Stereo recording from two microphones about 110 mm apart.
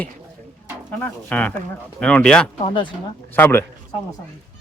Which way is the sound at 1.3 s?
15° left (ahead or behind).